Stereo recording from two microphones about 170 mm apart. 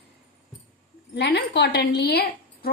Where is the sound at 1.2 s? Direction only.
85° left; by 2.7 s 70° left (ahead or behind).